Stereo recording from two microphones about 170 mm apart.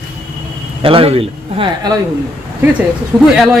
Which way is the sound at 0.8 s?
30° right (ahead or behind).